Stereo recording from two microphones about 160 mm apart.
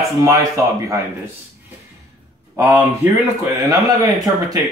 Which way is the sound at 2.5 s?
15° right (ahead or behind).